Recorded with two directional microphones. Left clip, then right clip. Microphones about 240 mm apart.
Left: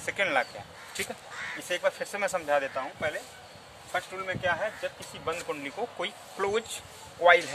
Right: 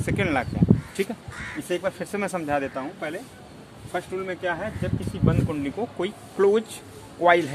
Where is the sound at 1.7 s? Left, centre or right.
Centre.